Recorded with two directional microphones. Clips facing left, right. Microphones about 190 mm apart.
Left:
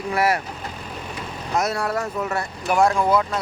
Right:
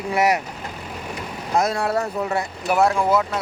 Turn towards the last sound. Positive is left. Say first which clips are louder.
# even
turn(degrees=-5)  # may be behind; listen again after turning